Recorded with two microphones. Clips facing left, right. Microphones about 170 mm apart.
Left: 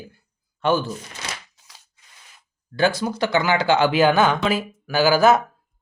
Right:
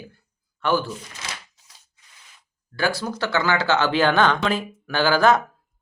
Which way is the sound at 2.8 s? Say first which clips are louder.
Left 4 dB; 20° left (ahead or behind).